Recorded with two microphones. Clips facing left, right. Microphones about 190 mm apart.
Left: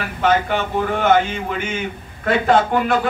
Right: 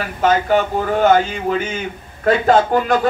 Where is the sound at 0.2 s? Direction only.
40° right (ahead or behind).